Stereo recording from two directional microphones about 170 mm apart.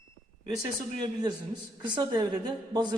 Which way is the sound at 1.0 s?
25° right (ahead or behind).